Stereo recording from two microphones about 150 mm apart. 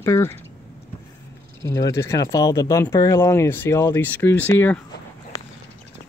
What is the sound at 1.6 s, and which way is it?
Speech, 20° left (ahead or behind).